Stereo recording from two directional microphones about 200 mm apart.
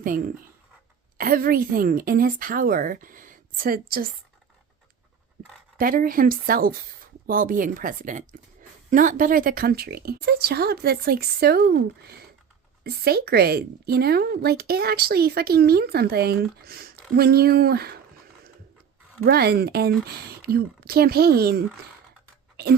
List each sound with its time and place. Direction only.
0.0 s a woman's voice: 40° right (ahead or behind)
5.7 s a woman's voice: 45° right (ahead or behind)
19.2 s a woman's voice: 50° right (ahead or behind)